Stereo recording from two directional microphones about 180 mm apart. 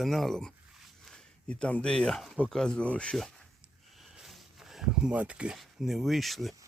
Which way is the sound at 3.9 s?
Centre (ahead or behind).